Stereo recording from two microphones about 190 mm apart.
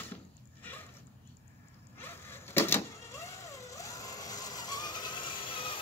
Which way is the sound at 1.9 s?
10° left (ahead or behind).